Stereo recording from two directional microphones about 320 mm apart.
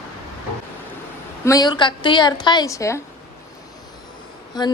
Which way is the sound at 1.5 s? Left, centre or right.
Centre.